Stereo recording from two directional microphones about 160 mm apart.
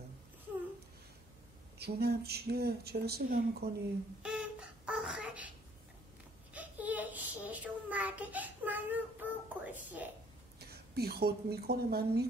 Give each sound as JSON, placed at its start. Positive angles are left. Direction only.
{"t": 1.8, "sound": "speech", "side_deg": -80}
{"t": 4.2, "sound": "a sound", "side_deg": -5}
{"t": 6.5, "sound": "child singing", "side_deg": -10}
{"t": 10.6, "sound": "speech", "side_deg": -80}